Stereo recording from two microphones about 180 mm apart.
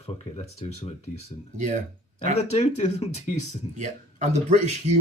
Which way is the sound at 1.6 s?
40° right (ahead or behind).